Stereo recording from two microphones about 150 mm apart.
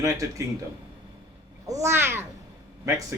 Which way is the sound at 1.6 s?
20° right (ahead or behind).